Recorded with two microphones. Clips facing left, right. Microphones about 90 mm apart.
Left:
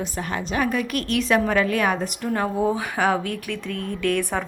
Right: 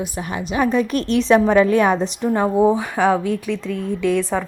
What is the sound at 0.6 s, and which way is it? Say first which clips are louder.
A woman's voice: right 8 dB; 30° right (ahead or behind).